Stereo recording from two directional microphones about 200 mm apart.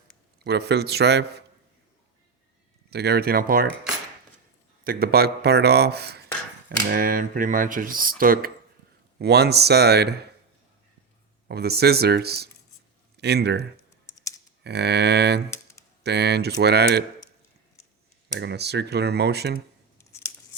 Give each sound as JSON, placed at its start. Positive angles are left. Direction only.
{"t": 0.4, "sound": "speech", "side_deg": -55}
{"t": 2.9, "sound": "speech", "side_deg": -55}
{"t": 4.8, "sound": "speech", "side_deg": -50}
{"t": 11.4, "sound": "speech", "side_deg": -55}
{"t": 14.6, "sound": "speech", "side_deg": -55}
{"t": 18.3, "sound": "speech", "side_deg": -55}
{"t": 20.0, "sound": "scissors", "side_deg": 15}